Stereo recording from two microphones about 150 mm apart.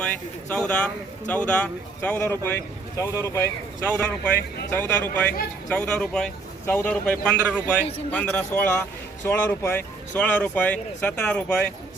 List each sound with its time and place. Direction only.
0.0 s speech: 5° left (ahead or behind)